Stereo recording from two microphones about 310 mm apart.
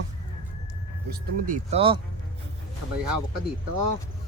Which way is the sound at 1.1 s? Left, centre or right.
Right.